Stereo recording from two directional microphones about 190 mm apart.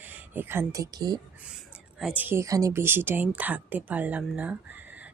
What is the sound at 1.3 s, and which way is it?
Speech, 5° right (ahead or behind).